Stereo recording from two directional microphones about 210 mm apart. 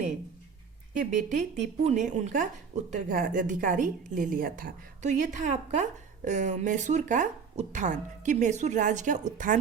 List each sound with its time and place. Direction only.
0.9 s a woman's voice: 35° right (ahead or behind)